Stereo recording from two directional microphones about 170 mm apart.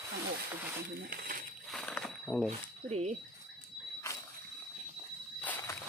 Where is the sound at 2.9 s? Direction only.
40° right (ahead or behind).